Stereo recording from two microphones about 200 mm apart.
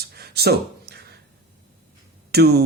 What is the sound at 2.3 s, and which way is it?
Speech, 55° right (ahead or behind).